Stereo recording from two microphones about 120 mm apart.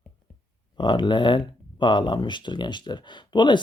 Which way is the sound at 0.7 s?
40° left (ahead or behind).